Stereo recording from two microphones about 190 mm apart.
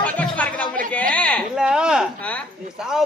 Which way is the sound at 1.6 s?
5° right (ahead or behind).